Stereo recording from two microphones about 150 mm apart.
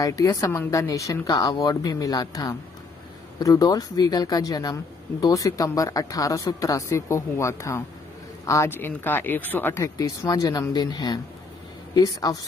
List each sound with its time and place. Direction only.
0.0 s a woman's voice: 25° left (ahead or behind)